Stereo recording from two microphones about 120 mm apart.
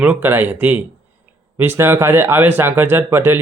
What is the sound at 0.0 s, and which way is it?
Speech, 15° right (ahead or behind).